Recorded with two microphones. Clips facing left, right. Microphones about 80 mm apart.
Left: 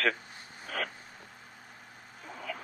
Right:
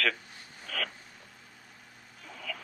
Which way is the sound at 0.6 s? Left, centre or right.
Left.